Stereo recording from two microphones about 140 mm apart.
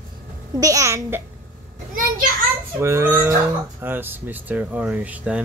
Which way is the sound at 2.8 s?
20° right (ahead or behind).